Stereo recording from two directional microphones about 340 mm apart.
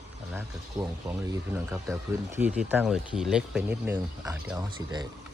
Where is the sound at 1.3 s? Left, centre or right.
Centre.